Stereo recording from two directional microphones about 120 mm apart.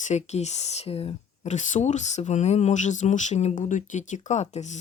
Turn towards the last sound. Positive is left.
turn(degrees=75)  # may be behind; listen again after turning